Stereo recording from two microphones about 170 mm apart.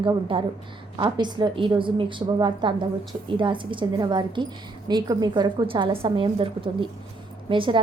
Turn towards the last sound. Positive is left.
turn(degrees=-30)  # may be behind; listen again after turning